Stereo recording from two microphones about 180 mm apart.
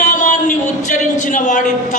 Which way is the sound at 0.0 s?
45° left (ahead or behind).